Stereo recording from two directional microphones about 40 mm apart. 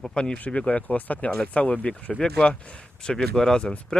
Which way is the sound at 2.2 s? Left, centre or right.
Left.